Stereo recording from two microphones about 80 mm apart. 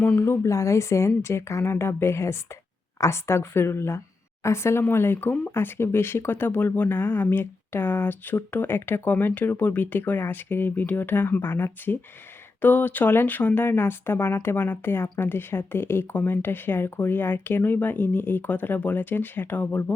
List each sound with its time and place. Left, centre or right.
0.2 s a woman's voice: left